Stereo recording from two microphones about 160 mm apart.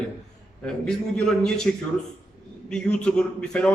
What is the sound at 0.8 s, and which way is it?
A man's voice, 5° left (ahead or behind).